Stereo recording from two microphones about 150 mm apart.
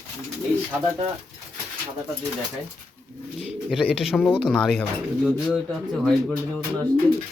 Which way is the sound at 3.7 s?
5° right (ahead or behind).